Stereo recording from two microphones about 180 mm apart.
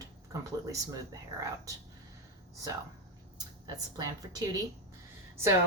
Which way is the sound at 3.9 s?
20° right (ahead or behind).